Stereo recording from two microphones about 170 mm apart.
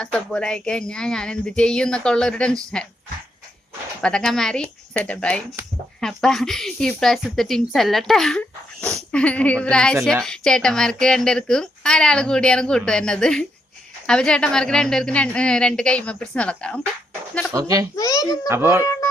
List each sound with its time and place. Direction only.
0.0 s a child's voice: 5° left (ahead or behind)
4.0 s a child's voice: 5° left (ahead or behind)
17.5 s speech: 20° right (ahead or behind)
17.9 s a child's voice: 20° left (ahead or behind)
18.4 s a child's voice: 15° right (ahead or behind)